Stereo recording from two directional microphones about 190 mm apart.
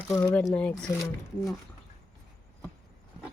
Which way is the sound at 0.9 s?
15° left (ahead or behind).